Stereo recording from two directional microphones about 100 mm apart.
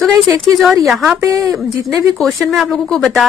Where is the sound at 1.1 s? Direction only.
30° right (ahead or behind).